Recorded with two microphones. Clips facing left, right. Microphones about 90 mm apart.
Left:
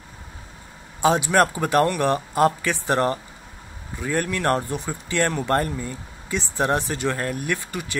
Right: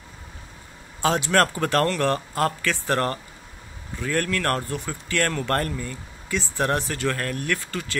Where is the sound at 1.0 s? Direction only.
15° left (ahead or behind).